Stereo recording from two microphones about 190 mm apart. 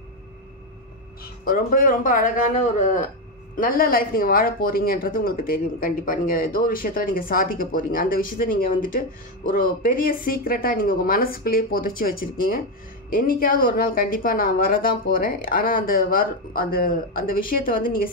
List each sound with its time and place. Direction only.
1.2 s speech: 50° left (ahead or behind)